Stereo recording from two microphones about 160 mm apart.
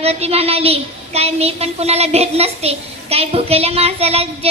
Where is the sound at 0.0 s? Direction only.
40° right (ahead or behind).